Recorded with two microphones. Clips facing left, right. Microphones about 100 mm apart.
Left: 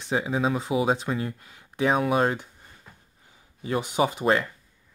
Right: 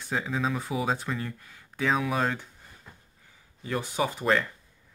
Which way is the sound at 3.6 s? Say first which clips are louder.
Left 4 dB; 20° left (ahead or behind).